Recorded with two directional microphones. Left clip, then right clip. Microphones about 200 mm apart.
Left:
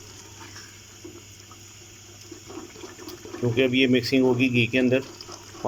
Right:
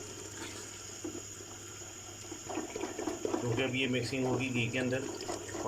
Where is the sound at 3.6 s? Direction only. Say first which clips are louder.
Left 15 dB; 50° left (ahead or behind).